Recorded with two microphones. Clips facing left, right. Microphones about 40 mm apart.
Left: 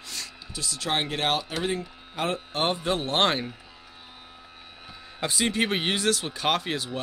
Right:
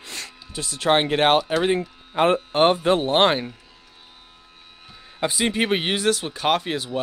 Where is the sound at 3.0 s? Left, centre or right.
Centre.